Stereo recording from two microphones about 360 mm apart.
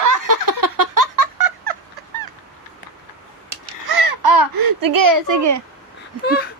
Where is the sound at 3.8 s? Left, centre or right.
Right.